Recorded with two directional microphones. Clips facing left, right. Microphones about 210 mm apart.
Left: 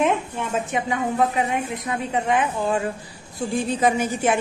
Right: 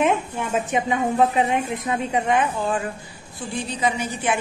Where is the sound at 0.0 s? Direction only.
10° right (ahead or behind).